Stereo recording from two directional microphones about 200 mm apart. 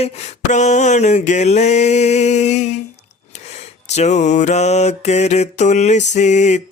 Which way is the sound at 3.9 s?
35° left (ahead or behind).